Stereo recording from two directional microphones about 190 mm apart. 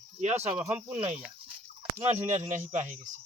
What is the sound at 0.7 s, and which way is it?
Speech, 10° right (ahead or behind).